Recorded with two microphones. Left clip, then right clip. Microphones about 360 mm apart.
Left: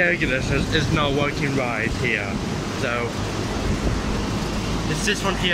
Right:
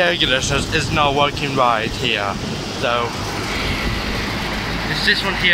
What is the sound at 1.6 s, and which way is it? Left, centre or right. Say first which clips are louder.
Speech: right 12 dB; right.